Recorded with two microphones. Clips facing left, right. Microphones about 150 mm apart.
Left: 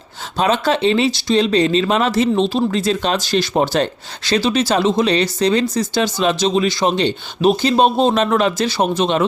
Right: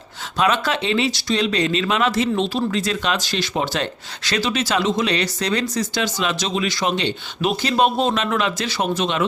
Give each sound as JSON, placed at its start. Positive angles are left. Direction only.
{"t": 0.3, "sound": "speech", "side_deg": 30}